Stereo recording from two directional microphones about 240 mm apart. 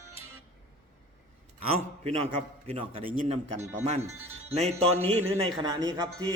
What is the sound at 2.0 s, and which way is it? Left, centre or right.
Music, right.